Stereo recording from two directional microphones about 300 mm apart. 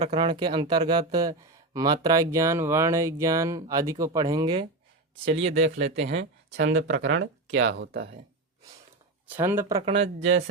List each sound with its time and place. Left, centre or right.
0.0 s speech: centre
5.5 s speech: right
9.3 s speech: centre
10.2 s speech: right